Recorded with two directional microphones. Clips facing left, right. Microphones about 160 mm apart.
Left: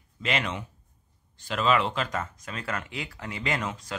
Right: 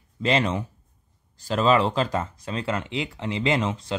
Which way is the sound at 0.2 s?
35° right (ahead or behind).